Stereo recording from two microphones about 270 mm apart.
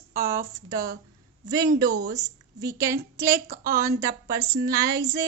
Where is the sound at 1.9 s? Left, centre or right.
Right.